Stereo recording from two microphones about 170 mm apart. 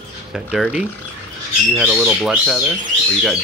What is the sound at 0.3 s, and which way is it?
Speech, 5° right (ahead or behind).